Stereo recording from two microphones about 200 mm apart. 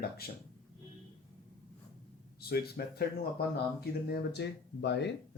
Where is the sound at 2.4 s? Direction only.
50° left (ahead or behind).